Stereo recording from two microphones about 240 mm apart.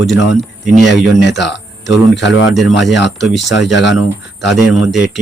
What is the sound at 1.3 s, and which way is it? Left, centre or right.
Speech, left.